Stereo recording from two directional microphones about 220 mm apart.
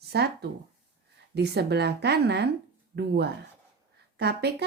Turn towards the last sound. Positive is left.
turn(degrees=-50)  # may be behind; listen again after turning